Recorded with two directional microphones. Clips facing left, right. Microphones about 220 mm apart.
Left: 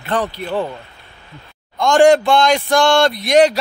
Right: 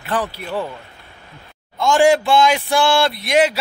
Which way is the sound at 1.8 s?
5° right (ahead or behind).